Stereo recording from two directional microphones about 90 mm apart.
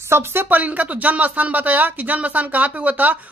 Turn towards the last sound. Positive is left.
turn(degrees=-20)  # may be behind; listen again after turning